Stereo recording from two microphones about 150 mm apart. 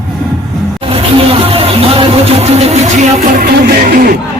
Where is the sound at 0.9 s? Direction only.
40° right (ahead or behind).